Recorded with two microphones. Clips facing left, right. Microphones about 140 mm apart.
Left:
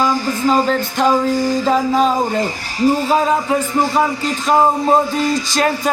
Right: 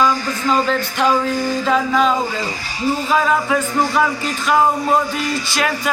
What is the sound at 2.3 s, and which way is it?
Speech, 50° left (ahead or behind).